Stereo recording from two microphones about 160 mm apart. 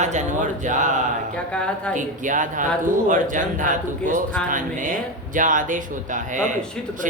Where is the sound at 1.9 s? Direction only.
55° right (ahead or behind).